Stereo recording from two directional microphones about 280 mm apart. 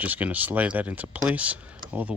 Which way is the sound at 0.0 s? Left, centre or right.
Centre.